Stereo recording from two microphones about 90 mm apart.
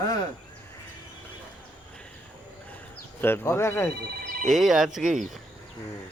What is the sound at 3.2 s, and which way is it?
Speech, 25° left (ahead or behind).